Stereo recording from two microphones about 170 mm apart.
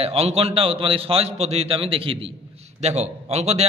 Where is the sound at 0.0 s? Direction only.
35° right (ahead or behind).